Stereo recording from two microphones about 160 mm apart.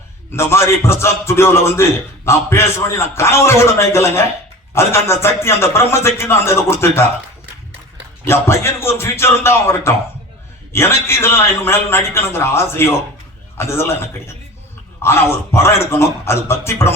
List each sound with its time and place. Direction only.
0.3 s a man's voice: 15° left (ahead or behind)
8.2 s a man's voice: 15° left (ahead or behind)